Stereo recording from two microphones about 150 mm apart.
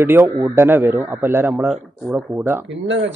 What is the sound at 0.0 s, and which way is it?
A man's voice, 20° right (ahead or behind).